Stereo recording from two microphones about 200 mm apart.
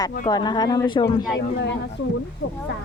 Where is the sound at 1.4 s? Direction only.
60° left (ahead or behind).